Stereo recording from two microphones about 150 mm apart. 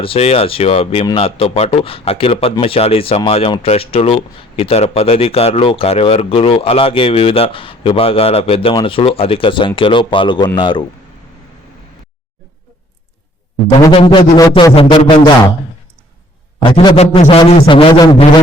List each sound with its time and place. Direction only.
0.0 s speech: 40° left (ahead or behind)
13.7 s music: 30° left (ahead or behind)
14.5 s speech: 35° left (ahead or behind)
16.6 s speech: 35° left (ahead or behind)